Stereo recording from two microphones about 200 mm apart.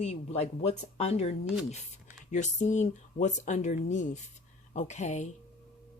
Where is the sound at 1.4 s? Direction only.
5° right (ahead or behind).